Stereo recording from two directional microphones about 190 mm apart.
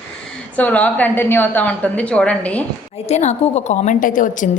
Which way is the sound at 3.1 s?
35° left (ahead or behind).